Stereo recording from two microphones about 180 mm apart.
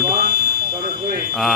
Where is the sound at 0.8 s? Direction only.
55° right (ahead or behind).